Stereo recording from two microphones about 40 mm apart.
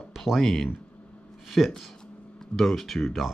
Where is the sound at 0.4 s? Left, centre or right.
Centre.